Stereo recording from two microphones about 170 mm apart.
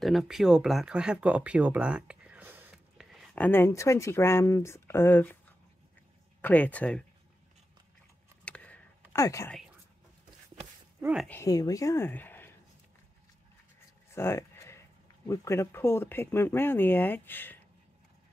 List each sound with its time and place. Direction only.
0.0 s speech: centre (ahead or behind)
3.4 s speech: 15° left (ahead or behind)
6.4 s speech: 10° left (ahead or behind)
8.5 s a sound: 5° left (ahead or behind)
9.2 s speech: 20° left (ahead or behind)
11.0 s speech: 5° right (ahead or behind)
11.2 s speech: 15° left (ahead or behind)
14.1 s a sound: 15° left (ahead or behind)
15.2 s speech: 20° left (ahead or behind)